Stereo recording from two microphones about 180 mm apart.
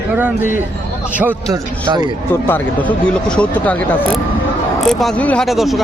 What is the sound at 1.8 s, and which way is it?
Speech, 25° right (ahead or behind).